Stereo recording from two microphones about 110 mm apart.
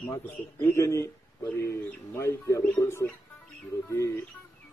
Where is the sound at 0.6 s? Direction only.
25° left (ahead or behind).